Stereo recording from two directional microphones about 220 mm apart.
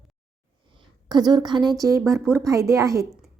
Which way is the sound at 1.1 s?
20° right (ahead or behind).